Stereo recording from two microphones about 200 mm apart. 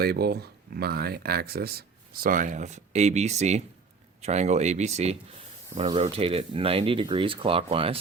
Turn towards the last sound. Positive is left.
turn(degrees=-30)  # may be behind; listen again after turning